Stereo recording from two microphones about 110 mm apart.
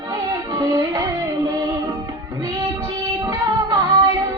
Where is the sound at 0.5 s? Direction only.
35° right (ahead or behind).